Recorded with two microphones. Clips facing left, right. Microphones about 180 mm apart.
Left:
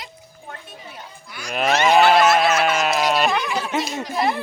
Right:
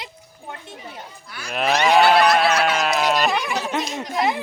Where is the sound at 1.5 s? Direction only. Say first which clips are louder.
Left 1 dB; centre (ahead or behind).